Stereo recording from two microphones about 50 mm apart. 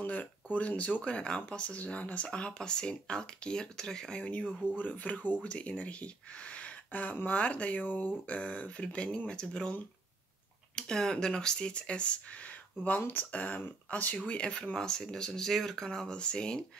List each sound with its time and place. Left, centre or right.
0.0 s speech: left
10.8 s speech: centre